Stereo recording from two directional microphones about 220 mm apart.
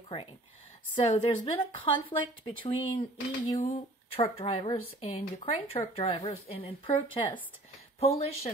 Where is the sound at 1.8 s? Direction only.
25° left (ahead or behind).